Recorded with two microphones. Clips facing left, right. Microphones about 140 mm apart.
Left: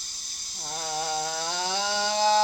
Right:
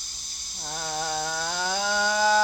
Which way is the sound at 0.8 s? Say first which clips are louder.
Even; 45° right (ahead or behind).